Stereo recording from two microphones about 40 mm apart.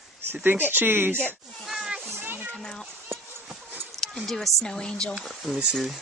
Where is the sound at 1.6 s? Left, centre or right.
Centre.